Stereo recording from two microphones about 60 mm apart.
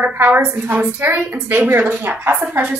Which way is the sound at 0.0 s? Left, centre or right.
Right.